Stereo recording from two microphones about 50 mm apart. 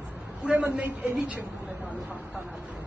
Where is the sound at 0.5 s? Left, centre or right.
Right.